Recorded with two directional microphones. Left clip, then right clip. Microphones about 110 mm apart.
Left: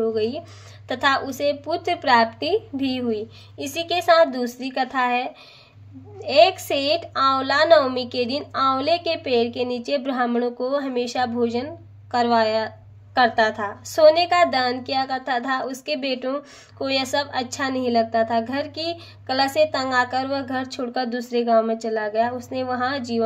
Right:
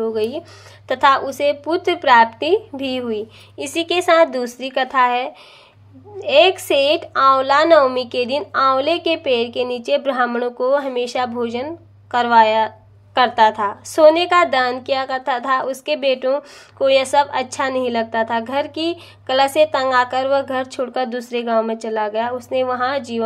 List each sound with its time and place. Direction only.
0.0 s a woman's voice: 40° right (ahead or behind)